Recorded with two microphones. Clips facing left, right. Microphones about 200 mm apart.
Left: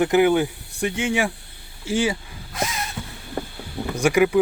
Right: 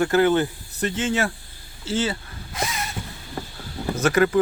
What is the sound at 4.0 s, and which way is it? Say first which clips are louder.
Speech: left 1 dB; 10° left (ahead or behind).